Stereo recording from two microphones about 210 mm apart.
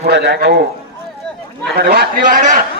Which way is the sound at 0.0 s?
55° right (ahead or behind).